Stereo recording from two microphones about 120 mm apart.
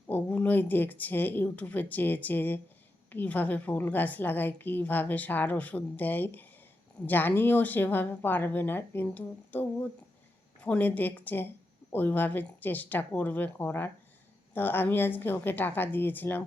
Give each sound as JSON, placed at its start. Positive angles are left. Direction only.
{"t": 0.1, "sound": "a woman's voice", "side_deg": 15}